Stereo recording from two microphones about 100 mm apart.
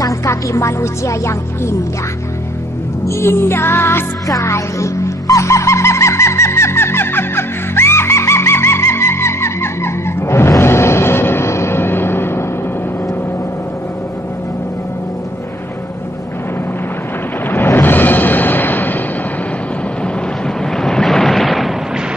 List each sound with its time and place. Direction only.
0.0 s speech: 30° left (ahead or behind)
3.1 s speech: 25° left (ahead or behind)
4.3 s music: 30° left (ahead or behind)
17.5 s music: 20° left (ahead or behind)
20.7 s a sound: 5° left (ahead or behind)